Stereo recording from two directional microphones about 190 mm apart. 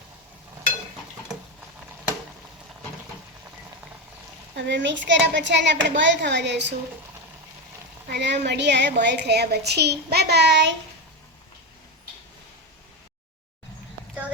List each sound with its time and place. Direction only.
4.5 s a child's voice: 70° right (ahead or behind)
8.1 s a woman's voice: 65° right (ahead or behind)